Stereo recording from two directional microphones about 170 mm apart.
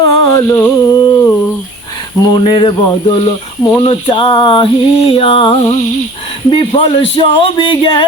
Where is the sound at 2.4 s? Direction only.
30° left (ahead or behind).